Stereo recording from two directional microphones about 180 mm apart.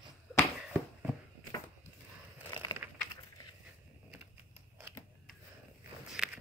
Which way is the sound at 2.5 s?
25° left (ahead or behind).